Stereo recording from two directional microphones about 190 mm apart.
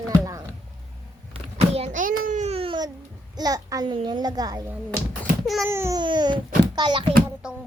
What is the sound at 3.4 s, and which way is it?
A child's voice, 20° right (ahead or behind).